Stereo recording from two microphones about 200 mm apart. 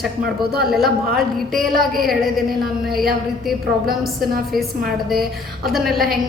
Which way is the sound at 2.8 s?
Centre (ahead or behind).